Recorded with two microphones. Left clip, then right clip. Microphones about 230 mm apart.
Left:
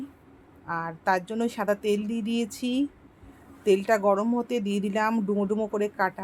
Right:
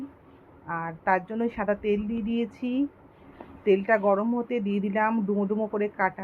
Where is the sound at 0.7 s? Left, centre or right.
Centre.